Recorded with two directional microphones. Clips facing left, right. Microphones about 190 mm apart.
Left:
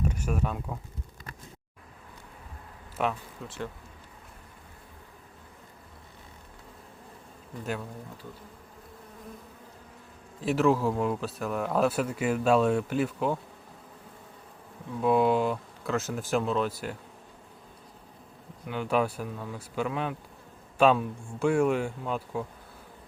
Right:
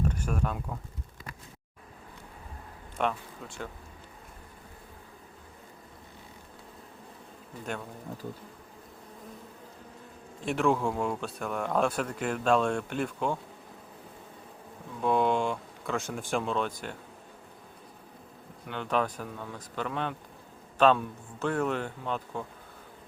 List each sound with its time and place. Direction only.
0.0 s speech: 10° left (ahead or behind)
3.0 s speech: 5° left (ahead or behind)
8.2 s bee: 40° right (ahead or behind)
10.4 s speech: 5° left (ahead or behind)
15.0 s speech: 5° left (ahead or behind)
18.6 s speech: 5° left (ahead or behind)